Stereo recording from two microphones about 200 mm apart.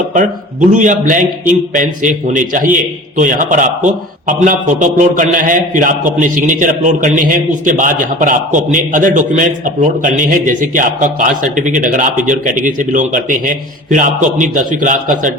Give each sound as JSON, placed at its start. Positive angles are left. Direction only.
{"t": 0.7, "sound": "a man's voice", "side_deg": -40}